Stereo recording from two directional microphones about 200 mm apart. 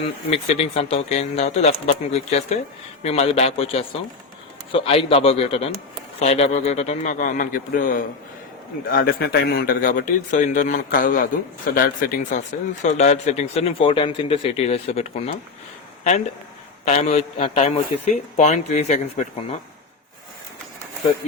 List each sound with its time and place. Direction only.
0.3 s a man's voice: 30° left (ahead or behind)
12.8 s a man's voice: 35° left (ahead or behind)
16.8 s a man's voice: 35° left (ahead or behind)